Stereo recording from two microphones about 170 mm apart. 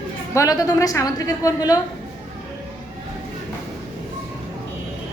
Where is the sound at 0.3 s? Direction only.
20° left (ahead or behind).